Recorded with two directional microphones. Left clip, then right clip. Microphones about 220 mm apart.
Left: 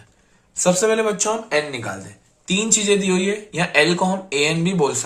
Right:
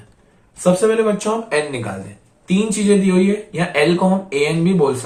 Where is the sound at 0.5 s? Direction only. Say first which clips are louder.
Right 3 dB; 45° left (ahead or behind).